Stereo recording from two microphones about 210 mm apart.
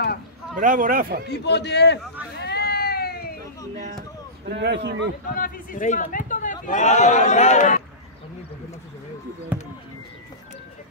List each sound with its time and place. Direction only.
0.6 s a man's voice: 40° right (ahead or behind)
1.3 s a man's voice: 55° left (ahead or behind)
2.3 s a sound: 50° left (ahead or behind)
4.5 s a man's voice: 55° right (ahead or behind)
5.3 s a man's voice: 40° left (ahead or behind)
9.5 s music: 10° right (ahead or behind)